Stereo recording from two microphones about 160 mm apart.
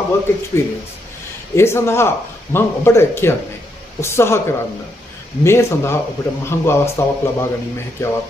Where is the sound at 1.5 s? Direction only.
15° left (ahead or behind).